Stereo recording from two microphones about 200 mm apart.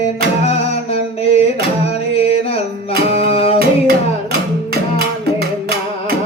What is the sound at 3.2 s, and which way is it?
Music, 30° left (ahead or behind).